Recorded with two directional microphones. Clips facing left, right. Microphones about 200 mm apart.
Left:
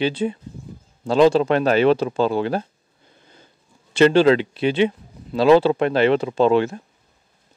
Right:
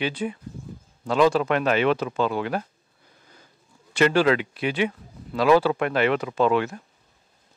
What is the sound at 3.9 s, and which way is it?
Speech, 25° left (ahead or behind).